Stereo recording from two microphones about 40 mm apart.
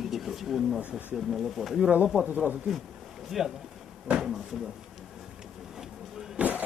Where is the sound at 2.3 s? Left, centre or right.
Right.